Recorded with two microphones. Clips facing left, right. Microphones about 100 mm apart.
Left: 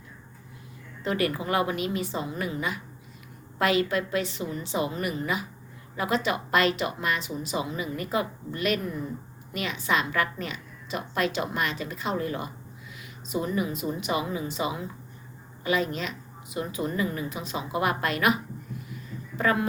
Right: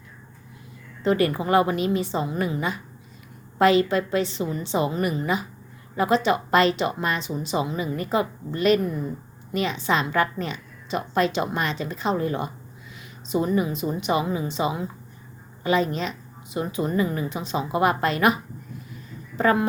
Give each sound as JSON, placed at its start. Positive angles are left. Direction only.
{"t": 1.0, "sound": "a woman's voice", "side_deg": -30}
{"t": 19.4, "sound": "a woman's voice", "side_deg": -30}